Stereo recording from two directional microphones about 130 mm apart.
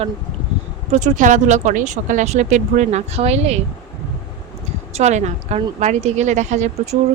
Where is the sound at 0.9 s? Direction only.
70° right (ahead or behind); by 3.6 s 55° right (ahead or behind).